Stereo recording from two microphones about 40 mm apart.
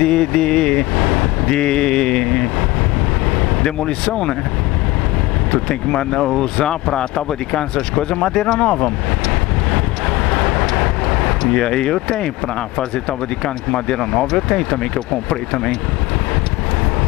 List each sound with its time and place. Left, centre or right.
0.0 s speech: centre
3.6 s speech: centre
5.5 s speech: left
10.3 s vehicle: centre
13.7 s speech: centre